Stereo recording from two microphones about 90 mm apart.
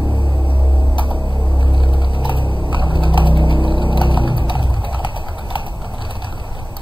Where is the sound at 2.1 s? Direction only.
65° left (ahead or behind).